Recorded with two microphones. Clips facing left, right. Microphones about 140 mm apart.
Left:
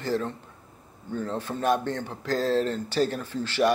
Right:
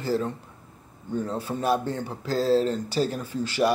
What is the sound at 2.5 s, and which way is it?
Speech, 35° right (ahead or behind).